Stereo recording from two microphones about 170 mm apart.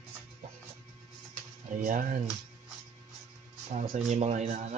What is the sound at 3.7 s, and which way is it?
Speech, 45° right (ahead or behind).